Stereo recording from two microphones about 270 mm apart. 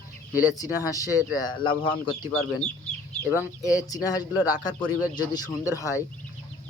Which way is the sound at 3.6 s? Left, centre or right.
Centre.